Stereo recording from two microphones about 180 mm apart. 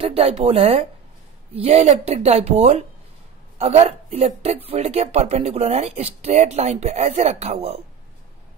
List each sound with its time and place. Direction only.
0.0 s speech: 30° right (ahead or behind)